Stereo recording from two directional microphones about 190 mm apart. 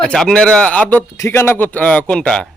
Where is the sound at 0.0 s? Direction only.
Centre (ahead or behind).